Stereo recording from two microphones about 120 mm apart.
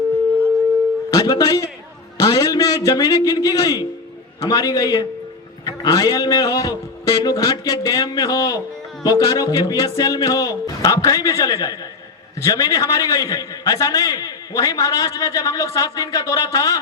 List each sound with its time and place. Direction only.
1.1 s a man's voice: 30° left (ahead or behind)